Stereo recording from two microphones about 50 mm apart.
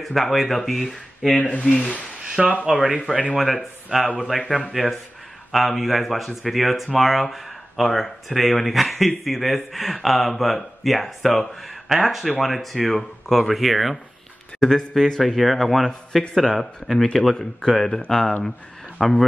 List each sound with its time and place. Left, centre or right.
0.0 s speech: centre
1.3 s speech: left
2.2 s speech: centre
3.3 s speech: centre
14.6 s speech: centre
17.4 s speech: centre